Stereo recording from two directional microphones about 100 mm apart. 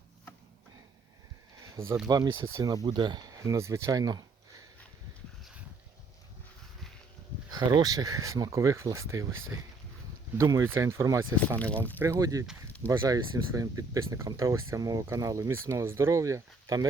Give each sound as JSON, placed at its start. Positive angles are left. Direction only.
{"t": 1.7, "sound": "speech", "side_deg": -30}
{"t": 2.0, "sound": "speech", "side_deg": -40}
{"t": 7.5, "sound": "speech", "side_deg": -40}